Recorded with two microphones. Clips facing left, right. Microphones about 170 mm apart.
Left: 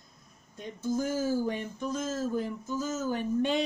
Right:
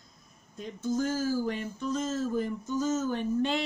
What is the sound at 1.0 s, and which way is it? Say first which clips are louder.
Speech: even; 15° left (ahead or behind).